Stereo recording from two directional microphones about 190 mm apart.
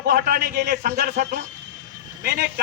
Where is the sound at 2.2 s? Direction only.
55° right (ahead or behind).